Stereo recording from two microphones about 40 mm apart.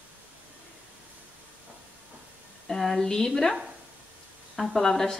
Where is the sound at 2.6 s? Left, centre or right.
Centre.